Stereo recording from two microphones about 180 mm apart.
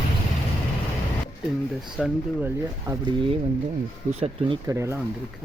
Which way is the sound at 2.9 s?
25° right (ahead or behind).